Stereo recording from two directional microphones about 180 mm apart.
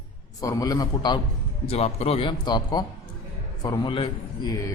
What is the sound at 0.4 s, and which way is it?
Speech, 20° left (ahead or behind).